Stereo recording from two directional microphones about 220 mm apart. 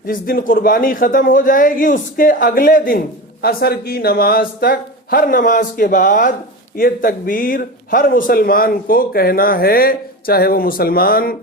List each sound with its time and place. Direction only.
0.1 s speech: 40° left (ahead or behind)